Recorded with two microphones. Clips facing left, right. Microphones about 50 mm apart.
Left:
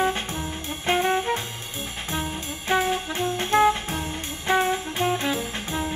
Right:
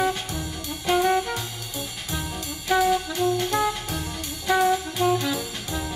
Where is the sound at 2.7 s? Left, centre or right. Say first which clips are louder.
Right 2 dB; left.